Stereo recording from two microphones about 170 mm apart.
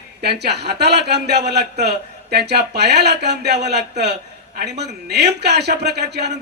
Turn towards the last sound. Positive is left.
turn(degrees=-80)